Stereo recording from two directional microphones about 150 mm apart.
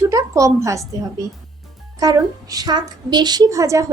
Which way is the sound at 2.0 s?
25° right (ahead or behind).